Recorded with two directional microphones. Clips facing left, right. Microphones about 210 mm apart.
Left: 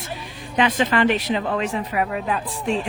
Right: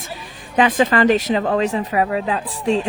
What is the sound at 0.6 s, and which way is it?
Speech, 45° right (ahead or behind).